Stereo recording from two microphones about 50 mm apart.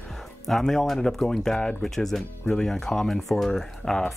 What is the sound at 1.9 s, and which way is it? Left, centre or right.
Speech, centre.